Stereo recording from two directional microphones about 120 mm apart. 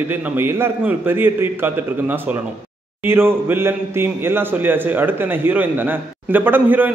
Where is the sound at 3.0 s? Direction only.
20° right (ahead or behind).